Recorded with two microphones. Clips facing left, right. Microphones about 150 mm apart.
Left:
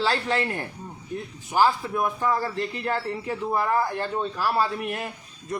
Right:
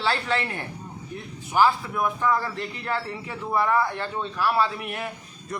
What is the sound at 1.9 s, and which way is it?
Speech, 25° left (ahead or behind).